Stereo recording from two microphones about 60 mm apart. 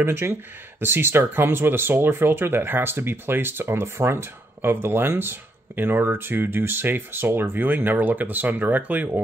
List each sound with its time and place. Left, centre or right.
0.0 s speech: right